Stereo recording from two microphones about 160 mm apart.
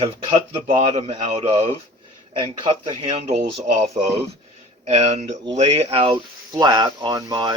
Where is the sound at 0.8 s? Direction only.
45° right (ahead or behind).